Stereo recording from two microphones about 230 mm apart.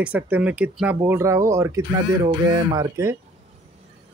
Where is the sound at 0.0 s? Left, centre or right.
Centre.